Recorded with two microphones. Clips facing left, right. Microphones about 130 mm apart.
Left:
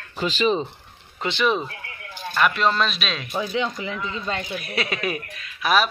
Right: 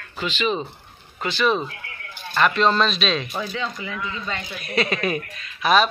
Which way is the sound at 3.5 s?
20° left (ahead or behind).